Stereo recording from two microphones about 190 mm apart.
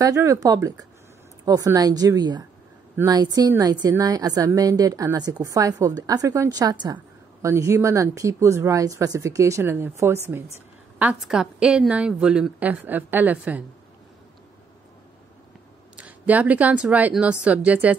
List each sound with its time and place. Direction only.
0.0 s a woman's voice: 15° right (ahead or behind)
16.0 s a woman's voice: 10° right (ahead or behind)